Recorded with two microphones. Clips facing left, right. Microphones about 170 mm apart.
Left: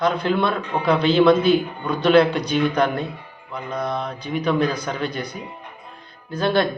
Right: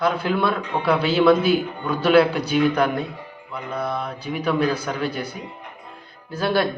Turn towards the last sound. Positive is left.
turn(degrees=-10)  # may be behind; listen again after turning